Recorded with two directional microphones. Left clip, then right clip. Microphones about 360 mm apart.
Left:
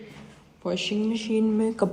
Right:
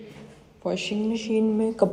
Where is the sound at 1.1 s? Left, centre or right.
Centre.